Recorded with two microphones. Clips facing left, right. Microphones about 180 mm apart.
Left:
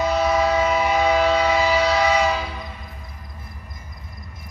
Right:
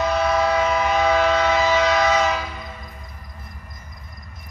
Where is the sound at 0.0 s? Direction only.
10° left (ahead or behind).